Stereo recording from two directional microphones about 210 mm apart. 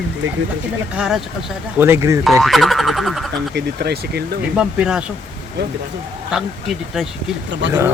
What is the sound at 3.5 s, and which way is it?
Speech, 50° right (ahead or behind).